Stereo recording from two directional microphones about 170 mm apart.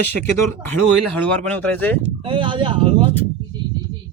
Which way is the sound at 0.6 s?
10° left (ahead or behind).